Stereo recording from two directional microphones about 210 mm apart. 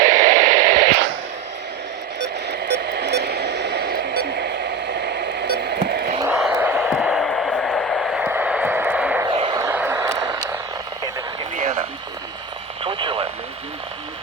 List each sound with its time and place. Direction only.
0.0 s radio: 40° right (ahead or behind)
2.2 s radio: 55° right (ahead or behind)
6.3 s a sound: 5° right (ahead or behind)
9.2 s vehicle: 25° right (ahead or behind)
9.6 s vehicle: 10° right (ahead or behind)
12.8 s radio: 25° right (ahead or behind)